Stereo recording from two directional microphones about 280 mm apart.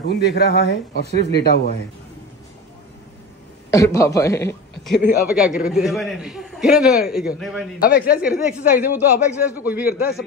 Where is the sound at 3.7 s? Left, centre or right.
Centre.